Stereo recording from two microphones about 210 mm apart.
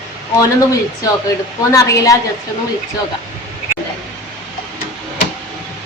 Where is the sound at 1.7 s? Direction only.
15° left (ahead or behind).